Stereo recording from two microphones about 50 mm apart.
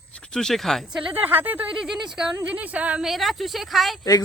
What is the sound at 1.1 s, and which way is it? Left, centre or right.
Speech, right.